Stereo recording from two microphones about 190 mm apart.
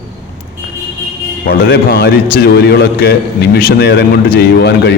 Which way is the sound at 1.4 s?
55° left (ahead or behind).